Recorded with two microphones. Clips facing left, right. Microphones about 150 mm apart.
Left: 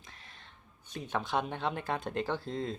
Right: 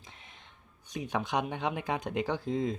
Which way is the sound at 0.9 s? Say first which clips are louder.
Right 1 dB; 10° right (ahead or behind).